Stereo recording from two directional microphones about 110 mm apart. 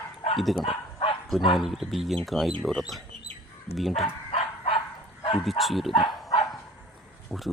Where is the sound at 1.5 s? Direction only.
Centre (ahead or behind).